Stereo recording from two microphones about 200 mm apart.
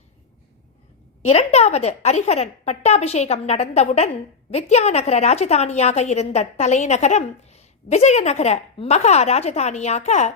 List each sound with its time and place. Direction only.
1.2 s a woman's voice: 30° left (ahead or behind)